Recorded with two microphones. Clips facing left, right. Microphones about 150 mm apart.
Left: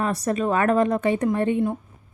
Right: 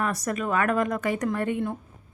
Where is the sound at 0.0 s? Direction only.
30° left (ahead or behind).